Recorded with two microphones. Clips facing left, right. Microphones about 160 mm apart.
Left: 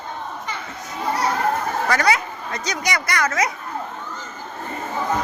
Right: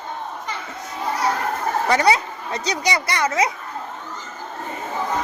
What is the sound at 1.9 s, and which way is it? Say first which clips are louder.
Speech: right 3 dB; 25° right (ahead or behind).